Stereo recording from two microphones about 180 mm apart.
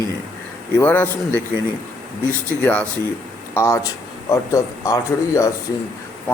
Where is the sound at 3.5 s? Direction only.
15° left (ahead or behind).